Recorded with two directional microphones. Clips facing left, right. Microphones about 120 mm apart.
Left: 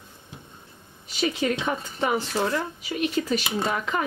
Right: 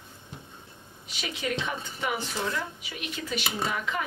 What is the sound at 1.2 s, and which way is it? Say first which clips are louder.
A woman's voice: left 7 dB; 40° left (ahead or behind).